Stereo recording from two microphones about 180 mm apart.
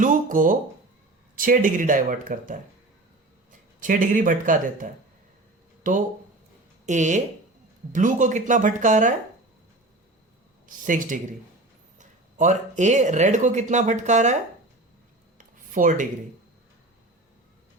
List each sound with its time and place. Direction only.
0.0 s speech: 45° right (ahead or behind)
3.8 s speech: 45° right (ahead or behind)
6.8 s speech: 45° right (ahead or behind)
10.7 s speech: 45° right (ahead or behind)
15.4 s a sound: 45° right (ahead or behind)